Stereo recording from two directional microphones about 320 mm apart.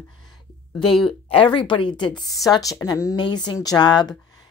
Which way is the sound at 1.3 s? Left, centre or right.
Centre.